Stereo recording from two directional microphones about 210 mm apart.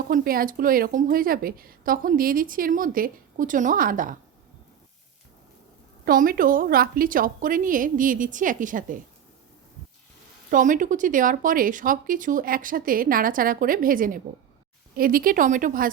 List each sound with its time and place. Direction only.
0.1 s a woman's voice: 45° right (ahead or behind)
6.1 s speech: 40° right (ahead or behind)
10.5 s speech: 40° right (ahead or behind)